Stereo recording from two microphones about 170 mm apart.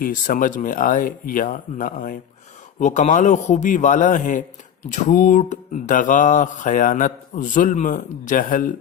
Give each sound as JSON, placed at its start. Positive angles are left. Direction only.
{"t": 0.0, "sound": "mantra", "side_deg": 55}